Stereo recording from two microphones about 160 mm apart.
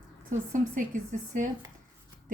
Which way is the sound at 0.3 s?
55° right (ahead or behind).